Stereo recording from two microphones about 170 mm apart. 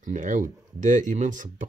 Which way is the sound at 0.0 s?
50° right (ahead or behind).